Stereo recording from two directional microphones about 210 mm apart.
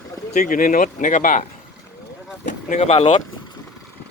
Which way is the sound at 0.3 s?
40° left (ahead or behind).